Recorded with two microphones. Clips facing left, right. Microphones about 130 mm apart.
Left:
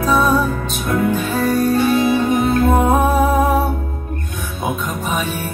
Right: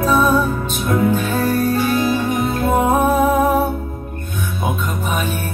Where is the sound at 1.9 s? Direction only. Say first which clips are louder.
Left 3 dB; 30° left (ahead or behind).